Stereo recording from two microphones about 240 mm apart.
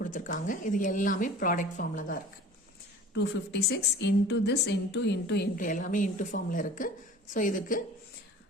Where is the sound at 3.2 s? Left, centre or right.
Left.